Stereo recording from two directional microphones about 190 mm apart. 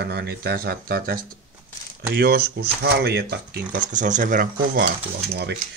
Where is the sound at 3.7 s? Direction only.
40° right (ahead or behind).